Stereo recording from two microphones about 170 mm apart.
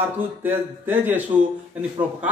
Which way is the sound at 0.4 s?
10° right (ahead or behind).